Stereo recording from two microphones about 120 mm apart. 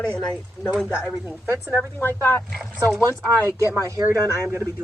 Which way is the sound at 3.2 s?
25° right (ahead or behind).